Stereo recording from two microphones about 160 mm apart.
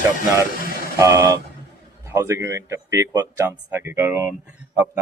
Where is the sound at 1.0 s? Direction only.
20° right (ahead or behind).